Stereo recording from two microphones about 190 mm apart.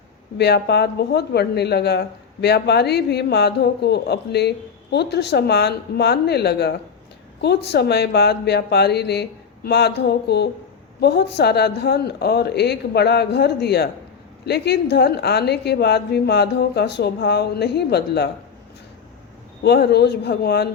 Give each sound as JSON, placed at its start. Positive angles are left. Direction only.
{"t": 0.3, "sound": "speech", "side_deg": 60}
{"t": 19.6, "sound": "speech", "side_deg": 60}